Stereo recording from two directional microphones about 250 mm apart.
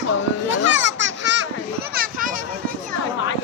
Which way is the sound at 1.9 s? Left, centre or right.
Right.